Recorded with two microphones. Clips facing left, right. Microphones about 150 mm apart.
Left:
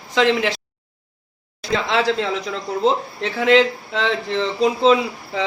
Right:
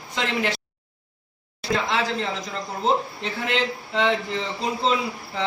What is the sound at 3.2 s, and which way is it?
A man's voice, 90° left.